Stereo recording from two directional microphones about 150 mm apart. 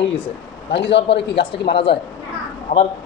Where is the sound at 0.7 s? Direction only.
40° left (ahead or behind).